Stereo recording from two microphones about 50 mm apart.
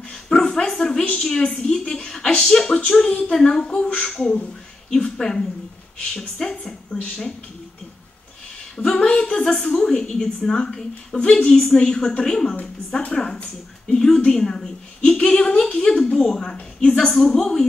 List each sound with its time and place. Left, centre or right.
0.3 s a woman's voice: centre
6.5 s speech: left
8.7 s a woman's voice: centre